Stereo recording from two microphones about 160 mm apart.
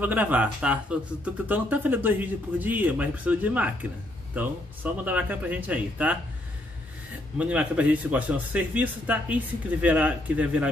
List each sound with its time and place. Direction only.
0.0 s speech: 10° right (ahead or behind)
7.3 s speech: 10° right (ahead or behind)